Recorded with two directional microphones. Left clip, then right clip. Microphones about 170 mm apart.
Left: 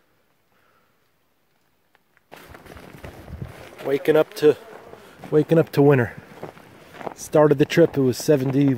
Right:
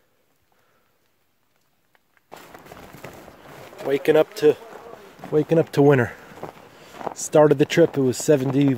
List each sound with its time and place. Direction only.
2.7 s run: centre (ahead or behind)
3.6 s speech: 10° right (ahead or behind)
5.3 s speech: 15° left (ahead or behind)
5.6 s speech: 5° right (ahead or behind)
6.4 s a sound: centre (ahead or behind)
7.2 s speech: 10° right (ahead or behind)